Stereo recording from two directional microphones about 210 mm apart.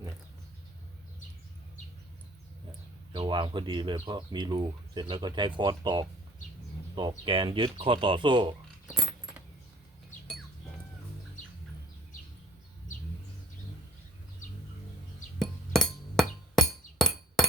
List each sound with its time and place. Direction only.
3.1 s speech: 25° right (ahead or behind)
8.9 s keys jangling: centre (ahead or behind)
15.4 s glass: centre (ahead or behind)